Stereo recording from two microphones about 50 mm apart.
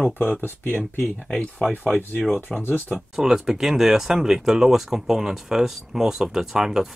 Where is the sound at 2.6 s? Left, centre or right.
Left.